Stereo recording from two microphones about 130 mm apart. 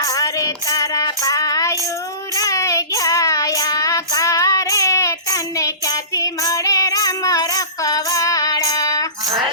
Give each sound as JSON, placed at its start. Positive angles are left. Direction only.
{"t": 0.0, "sound": "child singing", "side_deg": 25}